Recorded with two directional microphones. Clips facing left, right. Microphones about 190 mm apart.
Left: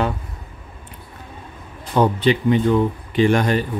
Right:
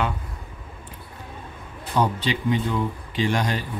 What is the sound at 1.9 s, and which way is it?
Speech, 55° left (ahead or behind).